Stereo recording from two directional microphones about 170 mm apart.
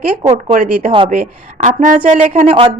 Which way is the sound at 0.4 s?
50° right (ahead or behind).